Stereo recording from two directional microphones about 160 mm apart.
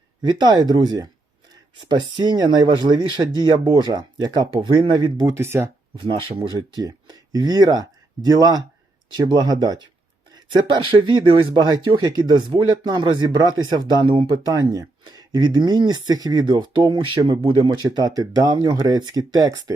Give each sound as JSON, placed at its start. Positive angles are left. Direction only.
{"t": 0.2, "sound": "speech", "side_deg": -25}
{"t": 6.0, "sound": "speech", "side_deg": -30}